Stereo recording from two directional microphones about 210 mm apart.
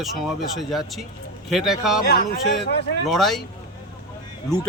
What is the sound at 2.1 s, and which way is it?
Speech, 50° left (ahead or behind).